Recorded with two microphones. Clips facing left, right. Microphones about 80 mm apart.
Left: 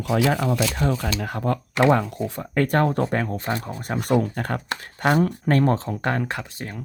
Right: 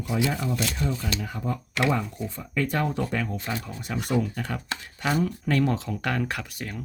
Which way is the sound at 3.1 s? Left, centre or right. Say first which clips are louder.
Left 5 dB; left.